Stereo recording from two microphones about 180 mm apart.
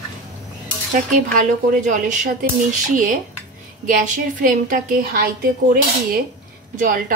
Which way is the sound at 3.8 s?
45° right (ahead or behind).